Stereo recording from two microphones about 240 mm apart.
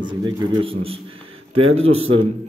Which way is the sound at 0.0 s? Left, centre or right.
Centre.